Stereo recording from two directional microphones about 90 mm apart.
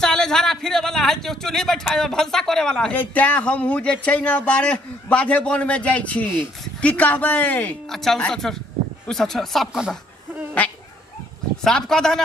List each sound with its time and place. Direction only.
0.0 s speech: 5° left (ahead or behind)
7.9 s speech: 5° left (ahead or behind)
11.6 s speech: 5° left (ahead or behind)